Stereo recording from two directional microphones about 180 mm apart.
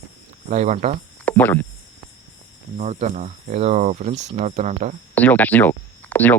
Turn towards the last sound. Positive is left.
turn(degrees=10)  # may be behind; listen again after turning